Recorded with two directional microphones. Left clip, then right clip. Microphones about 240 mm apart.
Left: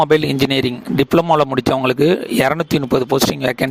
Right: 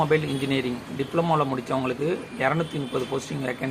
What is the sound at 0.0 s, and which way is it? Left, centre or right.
Speech, left.